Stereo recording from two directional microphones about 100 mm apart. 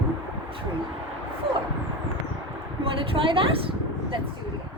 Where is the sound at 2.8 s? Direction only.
65° right (ahead or behind).